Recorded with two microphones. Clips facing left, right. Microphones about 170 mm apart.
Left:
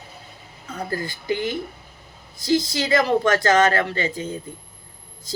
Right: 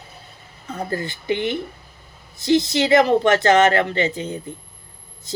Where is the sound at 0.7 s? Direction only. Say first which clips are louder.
Right 2 dB; 20° right (ahead or behind).